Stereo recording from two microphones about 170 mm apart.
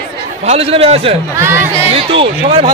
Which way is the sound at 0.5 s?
35° right (ahead or behind).